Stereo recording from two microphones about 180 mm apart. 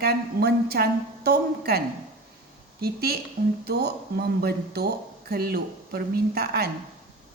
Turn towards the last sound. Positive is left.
turn(degrees=-60)  # may be behind; listen again after turning